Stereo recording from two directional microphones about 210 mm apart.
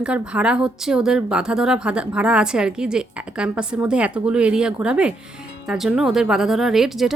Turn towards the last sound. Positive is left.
turn(degrees=0)  # may be behind; listen again after turning